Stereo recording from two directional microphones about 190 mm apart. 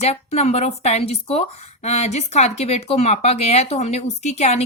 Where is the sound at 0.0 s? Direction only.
35° left (ahead or behind).